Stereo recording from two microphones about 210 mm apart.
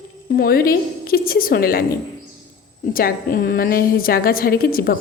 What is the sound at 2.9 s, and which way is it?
A woman's voice, 45° left (ahead or behind).